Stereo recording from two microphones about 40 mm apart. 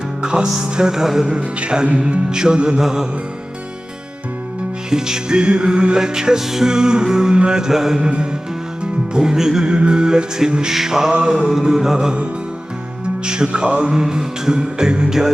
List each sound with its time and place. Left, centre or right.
0.2 s music: right
1.3 s music: right
4.9 s music: centre
7.7 s music: centre
8.0 s music: right
9.6 s music: right
13.2 s music: right